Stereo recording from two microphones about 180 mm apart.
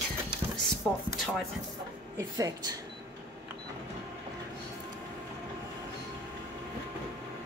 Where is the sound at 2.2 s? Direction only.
20° right (ahead or behind).